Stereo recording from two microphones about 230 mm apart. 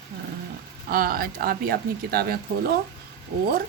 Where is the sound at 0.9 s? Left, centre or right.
Right.